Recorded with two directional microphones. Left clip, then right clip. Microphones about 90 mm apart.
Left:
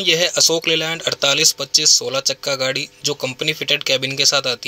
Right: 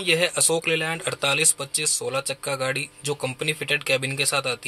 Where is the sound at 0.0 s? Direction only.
50° left (ahead or behind).